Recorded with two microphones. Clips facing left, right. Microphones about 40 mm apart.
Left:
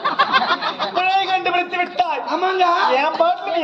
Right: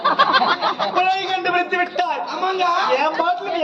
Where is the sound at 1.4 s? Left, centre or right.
Centre.